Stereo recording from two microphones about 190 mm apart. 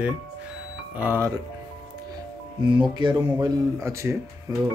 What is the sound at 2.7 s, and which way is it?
Speech, 25° right (ahead or behind).